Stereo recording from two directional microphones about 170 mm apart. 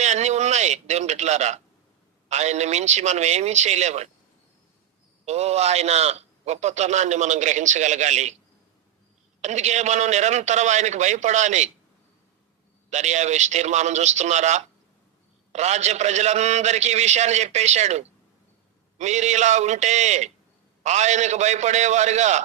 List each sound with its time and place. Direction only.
0.0 s a sound: 40° right (ahead or behind)
2.3 s a man's voice: 40° right (ahead or behind)
5.2 s a man's voice: 40° right (ahead or behind)
9.4 s a man's voice: 40° right (ahead or behind)
12.9 s a man's voice: 40° right (ahead or behind)